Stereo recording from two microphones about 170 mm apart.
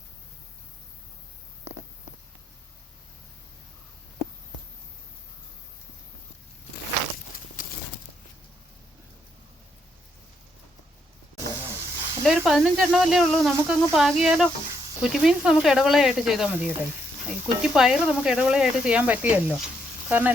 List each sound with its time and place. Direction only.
11.8 s sizzle: 15° right (ahead or behind)
12.5 s speech: centre (ahead or behind)